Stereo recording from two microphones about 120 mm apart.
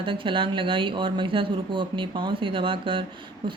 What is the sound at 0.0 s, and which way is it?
Speech, 45° right (ahead or behind).